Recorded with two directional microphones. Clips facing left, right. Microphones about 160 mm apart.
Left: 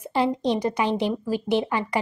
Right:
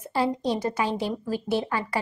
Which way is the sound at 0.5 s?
15° left (ahead or behind).